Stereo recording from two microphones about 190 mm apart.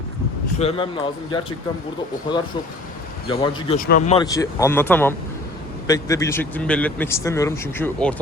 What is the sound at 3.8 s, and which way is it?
Speech, 50° left (ahead or behind).